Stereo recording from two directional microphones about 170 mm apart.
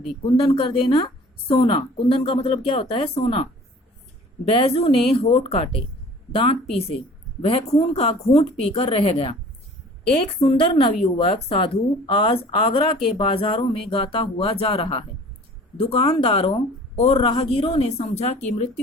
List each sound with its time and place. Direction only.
0.3 s a woman's voice: 35° left (ahead or behind)
4.4 s a woman's voice: 35° left (ahead or behind)